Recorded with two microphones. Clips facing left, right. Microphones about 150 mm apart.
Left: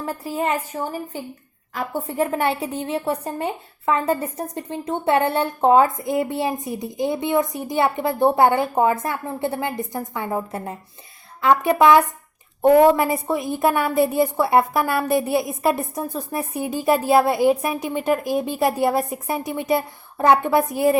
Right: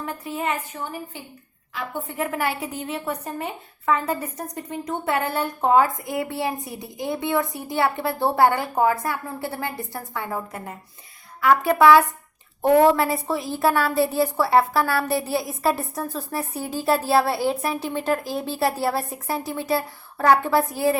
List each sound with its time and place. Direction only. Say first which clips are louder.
0.0 s a woman's voice: left 3 dB; 35° left (ahead or behind)